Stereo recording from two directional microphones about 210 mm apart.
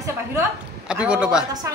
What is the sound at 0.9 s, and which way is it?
Speech, 5° right (ahead or behind).